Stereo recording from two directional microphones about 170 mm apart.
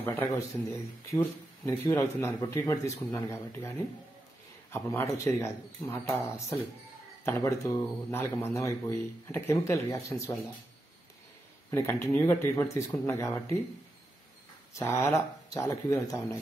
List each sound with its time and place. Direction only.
0.0 s speech: 10° left (ahead or behind)
1.7 s speech: 15° left (ahead or behind)
11.7 s speech: 15° left (ahead or behind)
14.7 s speech: 15° left (ahead or behind)